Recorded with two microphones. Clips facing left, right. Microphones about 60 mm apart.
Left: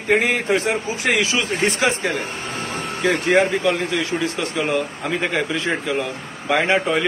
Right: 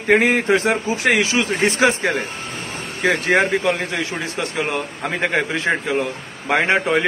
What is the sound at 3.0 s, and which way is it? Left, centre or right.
Speech, right.